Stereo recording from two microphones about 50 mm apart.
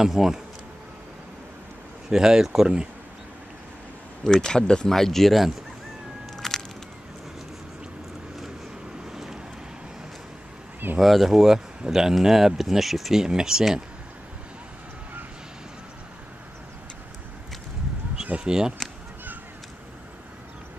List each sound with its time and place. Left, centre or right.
0.0 s speech: centre
2.0 s speech: centre
4.2 s speech: centre
6.3 s a sound: centre
9.1 s vehicle: centre
11.0 s speech: centre
18.2 s a sound: right